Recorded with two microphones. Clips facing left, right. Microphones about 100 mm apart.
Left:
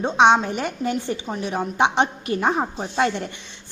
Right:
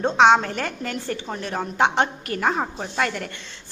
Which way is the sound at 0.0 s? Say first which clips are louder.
Even; 15° left (ahead or behind).